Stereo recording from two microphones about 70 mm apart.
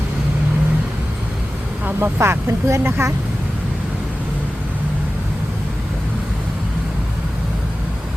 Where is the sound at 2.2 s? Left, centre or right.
Right.